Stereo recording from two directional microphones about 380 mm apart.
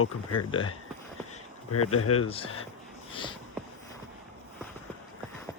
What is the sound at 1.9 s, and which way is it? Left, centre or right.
Speech, left.